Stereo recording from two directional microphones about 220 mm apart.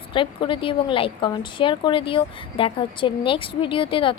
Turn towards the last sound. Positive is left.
turn(degrees=25)  # may be behind; listen again after turning